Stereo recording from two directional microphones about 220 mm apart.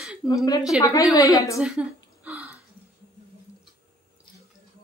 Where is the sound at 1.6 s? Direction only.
5° right (ahead or behind).